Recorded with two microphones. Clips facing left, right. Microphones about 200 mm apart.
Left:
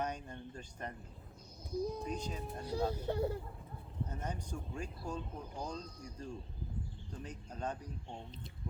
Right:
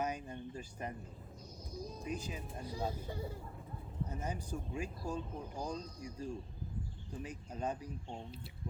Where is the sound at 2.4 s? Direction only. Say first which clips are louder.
Left 4 dB; 70° left (ahead or behind).